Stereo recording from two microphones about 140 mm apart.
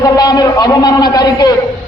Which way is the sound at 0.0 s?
25° left (ahead or behind).